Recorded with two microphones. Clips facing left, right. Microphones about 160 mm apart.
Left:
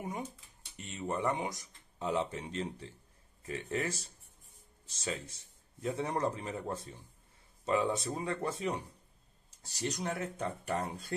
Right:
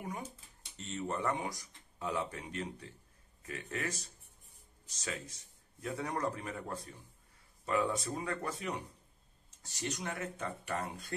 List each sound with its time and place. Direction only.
0.7 s speech: 15° left (ahead or behind); by 11.1 s 35° left (ahead or behind)